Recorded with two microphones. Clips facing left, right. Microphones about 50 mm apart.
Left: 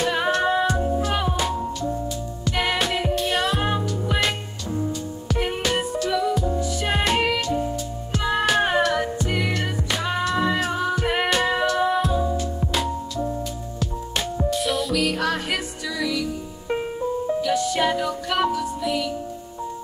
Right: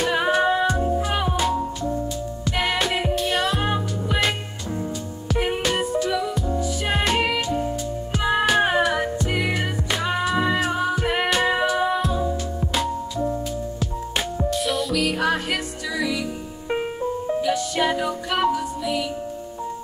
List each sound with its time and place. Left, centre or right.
0.0 s music: centre
2.4 s music: centre
5.3 s music: centre
7.3 s music: centre
16.6 s music: centre
17.5 s music: centre